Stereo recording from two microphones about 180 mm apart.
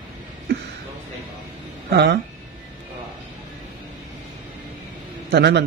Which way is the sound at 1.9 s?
70° right (ahead or behind).